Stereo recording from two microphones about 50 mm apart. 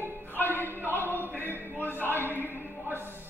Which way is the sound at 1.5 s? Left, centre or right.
Right.